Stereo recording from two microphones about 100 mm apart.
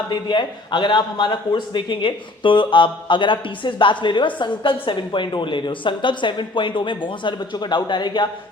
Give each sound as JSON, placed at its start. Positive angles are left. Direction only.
{"t": 0.3, "sound": "a man's voice", "side_deg": 50}